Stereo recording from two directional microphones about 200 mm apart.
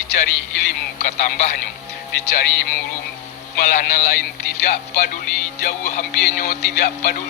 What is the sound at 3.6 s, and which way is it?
Speech, 40° left (ahead or behind).